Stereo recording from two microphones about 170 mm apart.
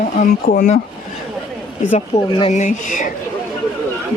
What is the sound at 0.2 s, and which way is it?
Speech, 55° left (ahead or behind).